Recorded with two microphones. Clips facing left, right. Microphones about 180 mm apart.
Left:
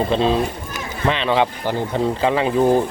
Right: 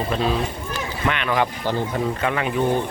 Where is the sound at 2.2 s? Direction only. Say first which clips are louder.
Left 7 dB; 30° left (ahead or behind).